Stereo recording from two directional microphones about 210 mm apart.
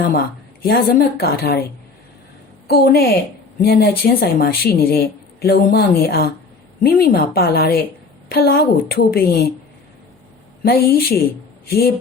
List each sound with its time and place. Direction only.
0.6 s speech: 45° left (ahead or behind)
2.6 s speech: 45° left (ahead or behind)
10.6 s a woman's voice: 45° left (ahead or behind)